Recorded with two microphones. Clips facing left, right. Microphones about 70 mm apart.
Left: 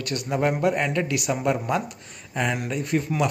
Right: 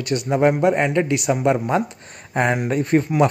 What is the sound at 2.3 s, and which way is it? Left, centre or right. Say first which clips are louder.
Speech: right 6 dB; right.